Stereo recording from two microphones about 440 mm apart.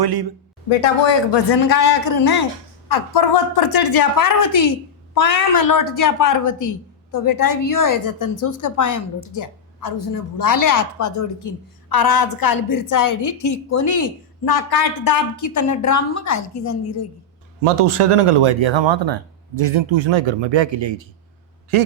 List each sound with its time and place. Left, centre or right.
0.0 s speech: right
0.7 s a man's voice: left
17.6 s speech: right
21.7 s speech: right